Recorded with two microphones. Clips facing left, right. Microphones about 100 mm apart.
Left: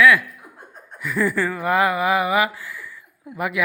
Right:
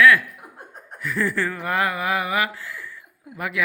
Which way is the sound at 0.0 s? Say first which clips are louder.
Even; 5° left (ahead or behind).